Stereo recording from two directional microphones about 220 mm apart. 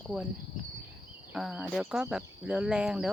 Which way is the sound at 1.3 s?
5° right (ahead or behind).